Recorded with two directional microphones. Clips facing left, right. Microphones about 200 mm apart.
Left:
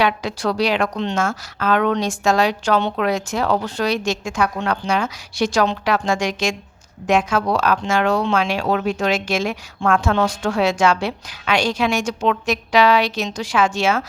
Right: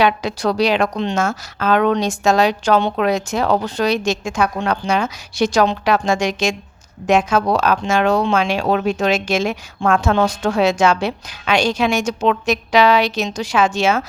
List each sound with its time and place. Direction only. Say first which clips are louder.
0.0 s speech: right 3 dB; 20° right (ahead or behind)